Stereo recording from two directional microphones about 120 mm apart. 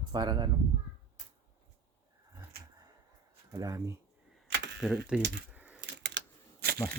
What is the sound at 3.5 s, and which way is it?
Speech, 30° right (ahead or behind).